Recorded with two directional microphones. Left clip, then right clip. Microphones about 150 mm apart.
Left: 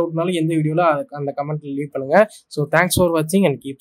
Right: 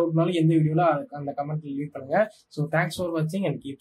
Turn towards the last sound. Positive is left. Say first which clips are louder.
# left 10 dB
turn(degrees=70)  # may be behind; listen again after turning